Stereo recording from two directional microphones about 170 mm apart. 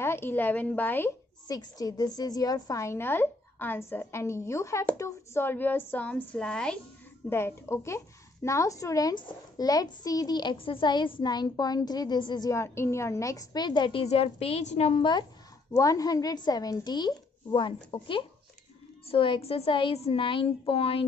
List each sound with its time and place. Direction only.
0.0 s a woman's voice: 15° left (ahead or behind); by 21.0 s 35° left (ahead or behind)